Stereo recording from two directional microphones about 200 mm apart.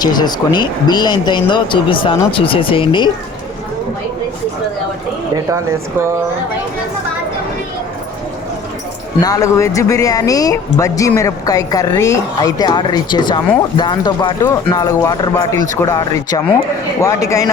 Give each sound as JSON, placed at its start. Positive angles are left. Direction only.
{"t": 0.0, "sound": "speech", "side_deg": 20}
{"t": 5.5, "sound": "speech", "side_deg": -15}
{"t": 9.2, "sound": "speech", "side_deg": 15}